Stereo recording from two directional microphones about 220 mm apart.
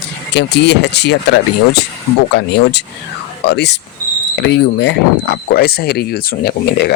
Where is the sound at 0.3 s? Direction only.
50° left (ahead or behind).